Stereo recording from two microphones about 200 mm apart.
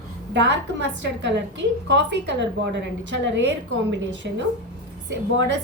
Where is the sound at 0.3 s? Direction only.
60° right (ahead or behind).